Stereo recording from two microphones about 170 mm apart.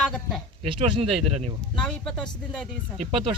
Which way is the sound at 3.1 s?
30° right (ahead or behind).